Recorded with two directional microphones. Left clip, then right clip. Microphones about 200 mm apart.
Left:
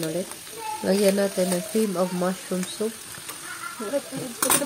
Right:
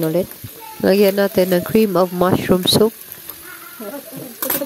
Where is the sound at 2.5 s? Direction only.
55° right (ahead or behind).